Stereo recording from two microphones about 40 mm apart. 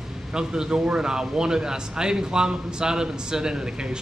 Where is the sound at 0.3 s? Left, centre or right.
Centre.